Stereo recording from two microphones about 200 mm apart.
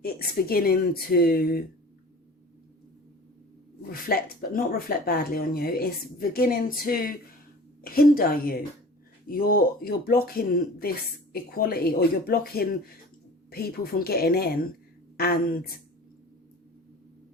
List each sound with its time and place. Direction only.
0.0 s speech: 50° left (ahead or behind)
3.8 s speech: 50° left (ahead or behind)